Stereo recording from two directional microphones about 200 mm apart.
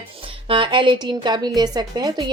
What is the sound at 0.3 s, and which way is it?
A woman's voice, 25° right (ahead or behind).